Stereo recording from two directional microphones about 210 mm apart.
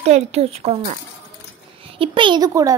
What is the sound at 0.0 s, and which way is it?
A child's voice, 30° right (ahead or behind).